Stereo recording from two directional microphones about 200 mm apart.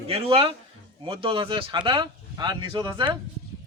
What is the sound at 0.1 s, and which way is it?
Speech, 30° right (ahead or behind).